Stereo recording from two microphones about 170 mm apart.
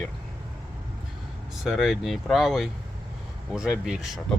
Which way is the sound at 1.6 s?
Centre (ahead or behind).